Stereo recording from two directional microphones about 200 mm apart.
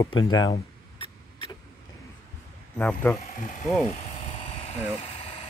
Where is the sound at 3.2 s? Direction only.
35° left (ahead or behind).